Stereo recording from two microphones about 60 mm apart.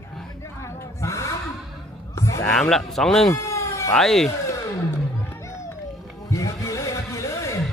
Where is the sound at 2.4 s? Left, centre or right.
Centre.